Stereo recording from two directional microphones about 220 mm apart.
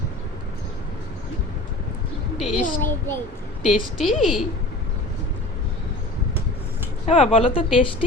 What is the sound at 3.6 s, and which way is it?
Speech, centre (ahead or behind).